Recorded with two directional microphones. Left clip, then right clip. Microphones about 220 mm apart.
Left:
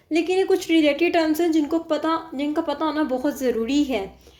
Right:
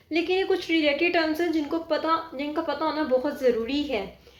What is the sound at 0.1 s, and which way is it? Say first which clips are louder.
A woman's voice: left 4 dB; 50° left (ahead or behind).